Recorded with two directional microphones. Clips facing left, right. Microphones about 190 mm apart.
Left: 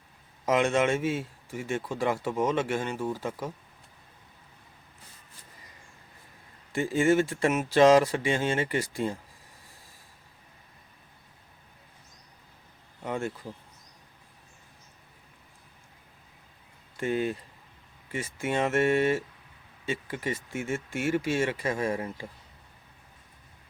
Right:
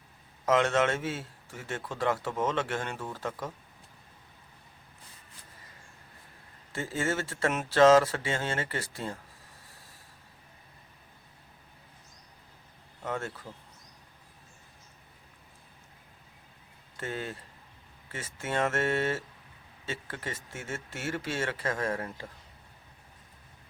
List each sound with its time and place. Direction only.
0.4 s speech: 10° left (ahead or behind)
6.7 s speech: 15° left (ahead or behind)
13.0 s speech: 10° left (ahead or behind)
17.0 s speech: 15° left (ahead or behind)